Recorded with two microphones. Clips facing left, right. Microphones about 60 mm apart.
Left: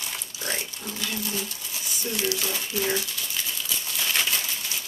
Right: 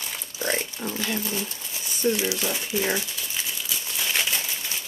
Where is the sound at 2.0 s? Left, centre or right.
Centre.